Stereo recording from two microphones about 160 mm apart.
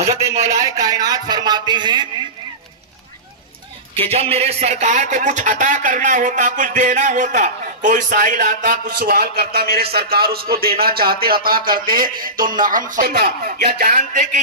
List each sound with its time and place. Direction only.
0.4 s a man's voice: 20° right (ahead or behind)
3.9 s a man's voice: 40° right (ahead or behind); by 12.8 s 60° right (ahead or behind)
12.9 s speech: 75° right (ahead or behind); by 14.3 s 55° right (ahead or behind)